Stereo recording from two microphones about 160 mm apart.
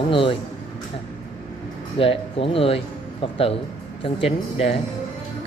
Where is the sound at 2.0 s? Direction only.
35° left (ahead or behind).